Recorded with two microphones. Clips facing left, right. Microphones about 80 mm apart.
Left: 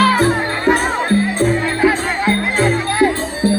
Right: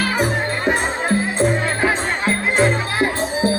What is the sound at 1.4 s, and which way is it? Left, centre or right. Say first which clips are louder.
Music: left 3 dB; right.